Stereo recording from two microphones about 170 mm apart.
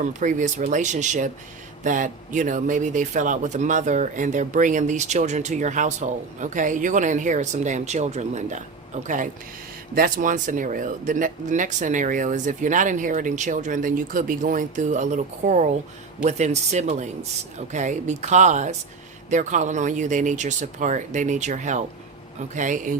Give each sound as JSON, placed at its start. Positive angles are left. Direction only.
{"t": 0.0, "sound": "speech", "side_deg": -45}